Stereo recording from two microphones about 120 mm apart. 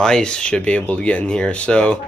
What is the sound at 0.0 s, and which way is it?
Speech, 5° left (ahead or behind).